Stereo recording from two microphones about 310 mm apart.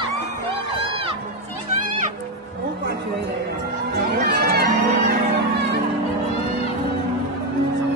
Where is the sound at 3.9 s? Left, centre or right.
Right.